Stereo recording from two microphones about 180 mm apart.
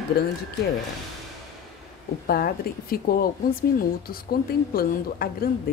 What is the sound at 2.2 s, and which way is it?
Speech, 55° left (ahead or behind).